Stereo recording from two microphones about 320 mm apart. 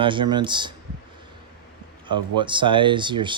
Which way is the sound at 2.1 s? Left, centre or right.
Centre.